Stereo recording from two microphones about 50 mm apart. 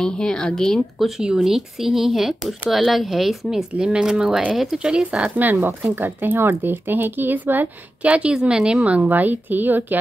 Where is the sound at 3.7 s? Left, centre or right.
Centre.